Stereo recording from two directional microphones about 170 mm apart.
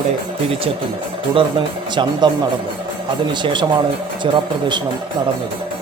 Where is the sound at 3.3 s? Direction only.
25° right (ahead or behind).